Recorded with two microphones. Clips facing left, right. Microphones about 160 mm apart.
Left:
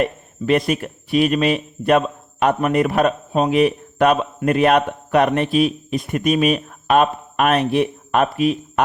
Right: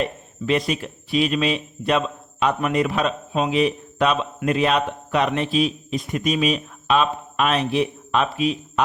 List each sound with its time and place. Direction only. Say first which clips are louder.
0.0 s a man's voice: left 4 dB; 55° left (ahead or behind)